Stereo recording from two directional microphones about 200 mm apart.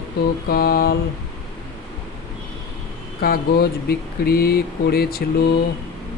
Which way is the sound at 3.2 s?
50° left (ahead or behind).